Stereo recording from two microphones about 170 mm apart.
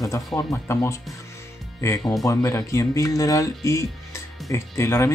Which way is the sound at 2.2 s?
20° left (ahead or behind).